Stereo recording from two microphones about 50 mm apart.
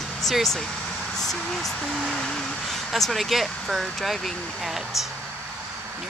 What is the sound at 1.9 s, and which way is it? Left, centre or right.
Speech, centre.